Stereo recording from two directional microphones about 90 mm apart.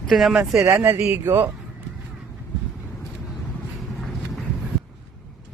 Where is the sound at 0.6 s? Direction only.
30° right (ahead or behind).